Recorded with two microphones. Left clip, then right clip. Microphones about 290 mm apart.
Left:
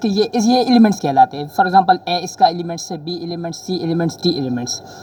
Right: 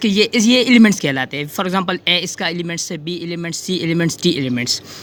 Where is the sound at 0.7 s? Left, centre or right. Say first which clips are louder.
Right 1 dB; right.